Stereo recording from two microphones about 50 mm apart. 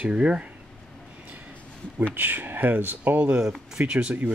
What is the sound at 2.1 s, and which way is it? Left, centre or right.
Speech, right.